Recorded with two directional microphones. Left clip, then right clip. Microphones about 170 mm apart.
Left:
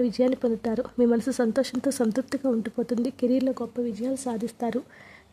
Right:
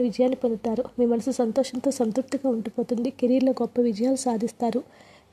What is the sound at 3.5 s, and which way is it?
Speech, 25° right (ahead or behind).